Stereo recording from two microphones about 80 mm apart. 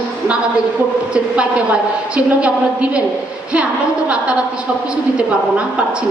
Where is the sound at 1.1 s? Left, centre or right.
Centre.